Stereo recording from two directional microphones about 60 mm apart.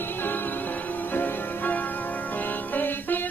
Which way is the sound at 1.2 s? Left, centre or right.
Left.